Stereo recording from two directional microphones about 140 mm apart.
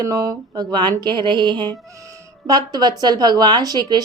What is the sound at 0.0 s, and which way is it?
Speech, 25° right (ahead or behind).